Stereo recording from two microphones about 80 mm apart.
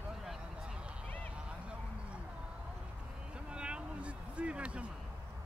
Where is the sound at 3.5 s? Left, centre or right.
Centre.